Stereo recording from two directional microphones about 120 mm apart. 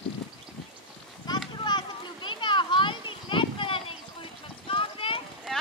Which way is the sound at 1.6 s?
40° left (ahead or behind).